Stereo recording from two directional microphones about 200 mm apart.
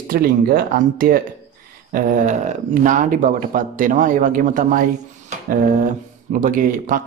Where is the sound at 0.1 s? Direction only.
45° right (ahead or behind).